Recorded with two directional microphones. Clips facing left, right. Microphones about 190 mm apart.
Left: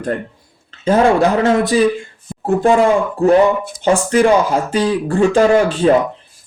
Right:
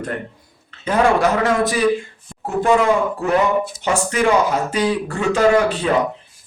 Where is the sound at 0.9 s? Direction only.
30° left (ahead or behind).